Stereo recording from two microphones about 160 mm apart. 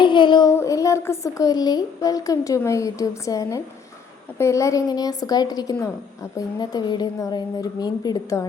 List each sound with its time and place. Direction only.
0.0 s child singing: 30° left (ahead or behind)
0.5 s speech: 20° left (ahead or behind)